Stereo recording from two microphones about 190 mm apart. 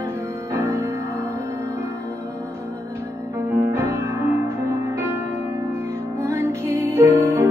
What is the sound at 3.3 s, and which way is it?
Music, 15° right (ahead or behind).